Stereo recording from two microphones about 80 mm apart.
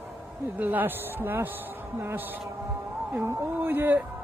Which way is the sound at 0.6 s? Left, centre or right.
Right.